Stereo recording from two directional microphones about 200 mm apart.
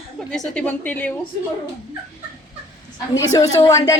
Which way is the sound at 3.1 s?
15° left (ahead or behind).